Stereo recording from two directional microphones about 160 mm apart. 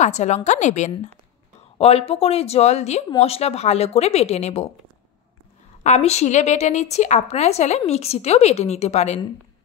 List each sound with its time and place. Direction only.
0.0 s a woman's voice: 45° left (ahead or behind)
5.9 s a woman's voice: 45° left (ahead or behind)